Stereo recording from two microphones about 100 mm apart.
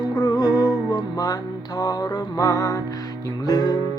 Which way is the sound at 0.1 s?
45° left (ahead or behind).